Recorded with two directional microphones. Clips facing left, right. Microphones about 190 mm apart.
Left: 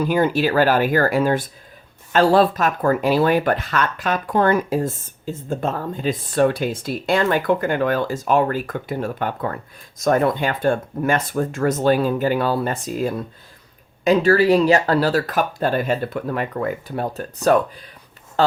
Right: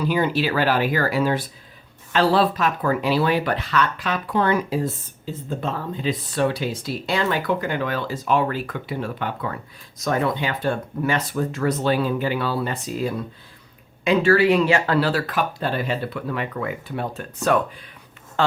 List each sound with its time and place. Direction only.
0.0 s speech: 45° left (ahead or behind)